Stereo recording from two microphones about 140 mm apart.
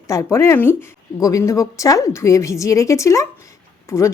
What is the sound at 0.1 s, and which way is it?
Speech, 20° left (ahead or behind).